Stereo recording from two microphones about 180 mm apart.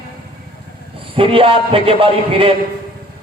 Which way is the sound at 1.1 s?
30° right (ahead or behind).